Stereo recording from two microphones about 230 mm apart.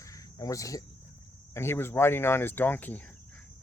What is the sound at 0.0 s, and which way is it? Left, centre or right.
Cricket, centre.